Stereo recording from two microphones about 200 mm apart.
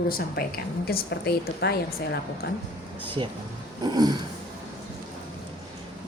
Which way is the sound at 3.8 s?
20° right (ahead or behind).